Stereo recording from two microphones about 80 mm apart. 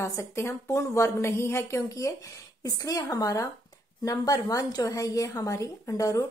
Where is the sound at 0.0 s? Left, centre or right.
Left.